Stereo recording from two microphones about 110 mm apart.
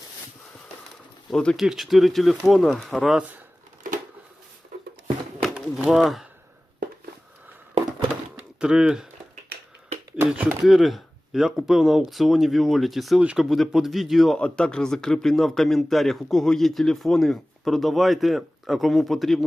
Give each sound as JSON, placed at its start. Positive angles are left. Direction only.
{"t": 1.3, "sound": "a man's voice", "side_deg": 5}
{"t": 5.4, "sound": "a sound", "side_deg": -5}
{"t": 8.5, "sound": "speech", "side_deg": -5}
{"t": 10.2, "sound": "speech", "side_deg": -15}
{"t": 10.7, "sound": "a man's voice", "side_deg": 0}